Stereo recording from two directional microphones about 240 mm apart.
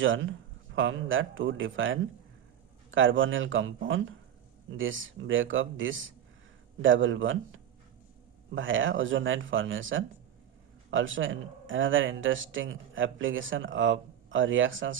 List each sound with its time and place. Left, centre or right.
0.0 s speech: right